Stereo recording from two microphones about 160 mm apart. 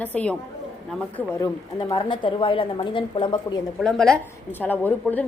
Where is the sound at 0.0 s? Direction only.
10° left (ahead or behind).